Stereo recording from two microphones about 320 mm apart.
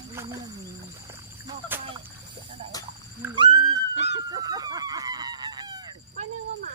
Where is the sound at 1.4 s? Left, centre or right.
Centre.